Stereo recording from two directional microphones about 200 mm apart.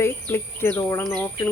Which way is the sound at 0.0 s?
10° left (ahead or behind).